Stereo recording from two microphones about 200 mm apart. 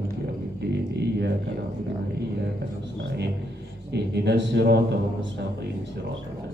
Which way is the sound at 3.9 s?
55° right (ahead or behind).